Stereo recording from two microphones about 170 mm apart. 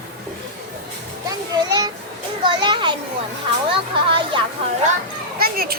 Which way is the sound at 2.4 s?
30° right (ahead or behind).